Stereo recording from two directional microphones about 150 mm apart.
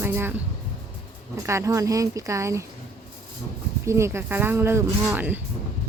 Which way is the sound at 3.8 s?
20° right (ahead or behind).